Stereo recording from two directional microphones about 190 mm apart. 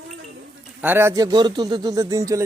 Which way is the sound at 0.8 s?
10° right (ahead or behind).